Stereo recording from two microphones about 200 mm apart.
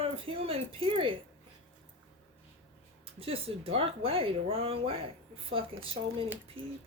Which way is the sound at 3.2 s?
30° right (ahead or behind).